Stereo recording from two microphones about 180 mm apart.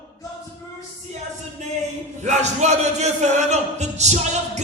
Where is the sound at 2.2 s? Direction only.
40° right (ahead or behind).